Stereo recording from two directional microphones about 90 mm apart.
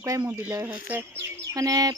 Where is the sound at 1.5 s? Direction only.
40° right (ahead or behind).